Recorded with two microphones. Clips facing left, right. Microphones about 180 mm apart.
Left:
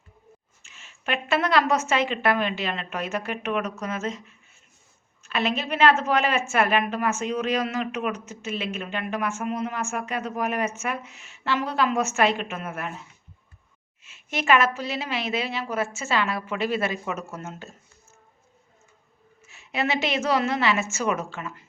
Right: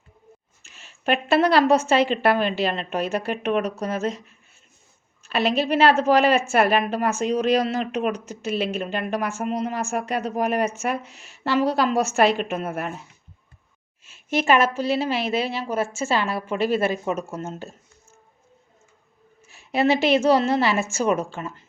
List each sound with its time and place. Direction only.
0.6 s a woman's voice: 35° right (ahead or behind)
5.2 s a woman's voice: 35° right (ahead or behind)
14.3 s a woman's voice: 30° right (ahead or behind)
19.5 s a sound: 35° right (ahead or behind)
20.1 s a woman's voice: 30° right (ahead or behind)